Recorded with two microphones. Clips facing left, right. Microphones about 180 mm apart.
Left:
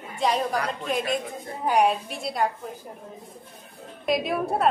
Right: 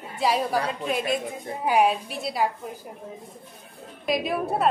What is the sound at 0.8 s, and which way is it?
A woman's voice, 5° right (ahead or behind).